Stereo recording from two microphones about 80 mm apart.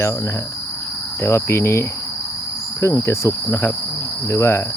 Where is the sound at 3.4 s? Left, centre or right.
Left.